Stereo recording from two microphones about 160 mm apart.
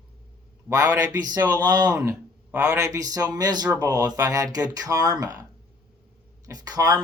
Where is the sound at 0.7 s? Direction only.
20° right (ahead or behind).